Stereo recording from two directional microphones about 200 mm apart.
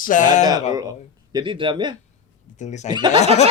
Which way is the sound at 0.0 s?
40° left (ahead or behind).